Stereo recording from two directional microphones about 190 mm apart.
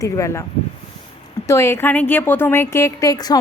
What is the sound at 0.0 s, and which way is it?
Speech, 15° left (ahead or behind).